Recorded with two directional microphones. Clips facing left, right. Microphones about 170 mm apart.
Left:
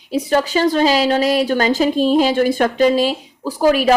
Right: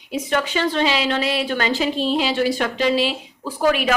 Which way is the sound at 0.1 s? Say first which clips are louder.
Left 5 dB; 35° left (ahead or behind).